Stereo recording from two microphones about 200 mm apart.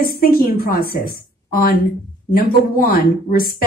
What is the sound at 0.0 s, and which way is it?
A woman's voice, 45° left (ahead or behind).